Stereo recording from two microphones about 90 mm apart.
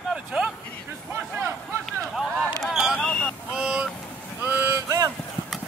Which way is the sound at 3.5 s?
10° right (ahead or behind).